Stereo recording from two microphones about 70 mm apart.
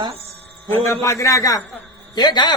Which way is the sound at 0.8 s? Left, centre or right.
Left.